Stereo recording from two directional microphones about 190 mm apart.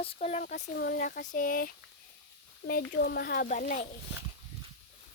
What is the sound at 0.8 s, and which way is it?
Speech, 50° left (ahead or behind).